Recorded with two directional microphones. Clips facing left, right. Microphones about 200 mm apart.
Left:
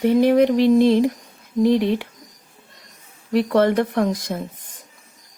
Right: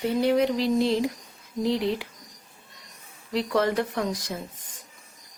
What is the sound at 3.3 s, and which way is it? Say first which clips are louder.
Speech: left 7 dB; 55° left (ahead or behind).